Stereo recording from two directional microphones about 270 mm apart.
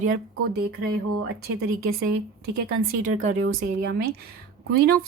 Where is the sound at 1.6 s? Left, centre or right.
Right.